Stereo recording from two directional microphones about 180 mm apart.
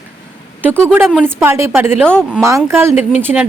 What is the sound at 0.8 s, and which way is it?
Speech, 10° right (ahead or behind).